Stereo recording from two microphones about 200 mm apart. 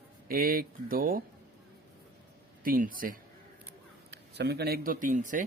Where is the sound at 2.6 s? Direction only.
45° right (ahead or behind).